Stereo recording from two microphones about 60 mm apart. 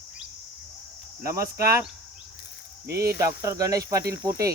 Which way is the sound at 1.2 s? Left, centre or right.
Right.